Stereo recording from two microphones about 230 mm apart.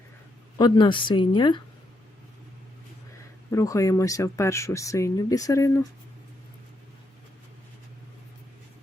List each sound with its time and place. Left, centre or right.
0.6 s a woman's voice: centre
3.5 s speech: centre